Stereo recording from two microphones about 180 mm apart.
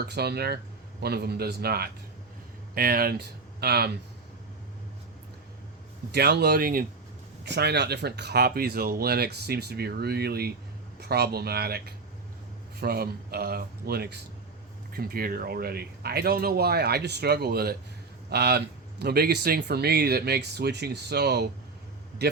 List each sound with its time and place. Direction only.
0.0 s speech: 65° right (ahead or behind)
6.1 s speech: 65° right (ahead or behind)
7.4 s speech: 70° right (ahead or behind)